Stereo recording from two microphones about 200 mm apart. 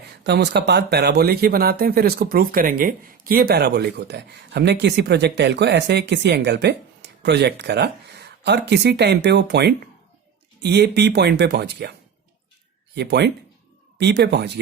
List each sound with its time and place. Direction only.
0.0 s speech: 55° right (ahead or behind)